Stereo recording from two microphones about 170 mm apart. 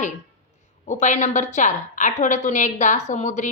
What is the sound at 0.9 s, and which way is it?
A woman's voice, 45° left (ahead or behind).